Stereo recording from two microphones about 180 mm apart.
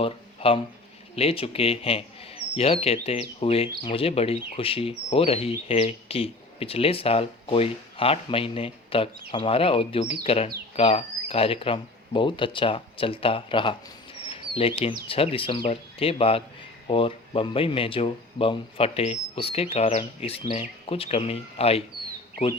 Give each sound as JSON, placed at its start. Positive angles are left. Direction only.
{"t": 0.0, "sound": "speech", "side_deg": 30}
{"t": 14.3, "sound": "bird", "side_deg": 30}
{"t": 15.0, "sound": "speech", "side_deg": 30}